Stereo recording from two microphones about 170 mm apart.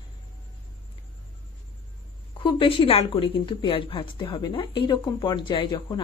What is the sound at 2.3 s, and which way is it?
Speech, 30° left (ahead or behind).